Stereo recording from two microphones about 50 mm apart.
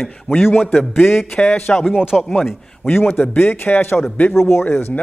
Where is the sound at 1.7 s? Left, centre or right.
Centre.